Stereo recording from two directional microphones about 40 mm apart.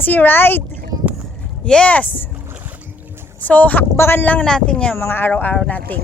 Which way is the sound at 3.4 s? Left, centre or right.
Left.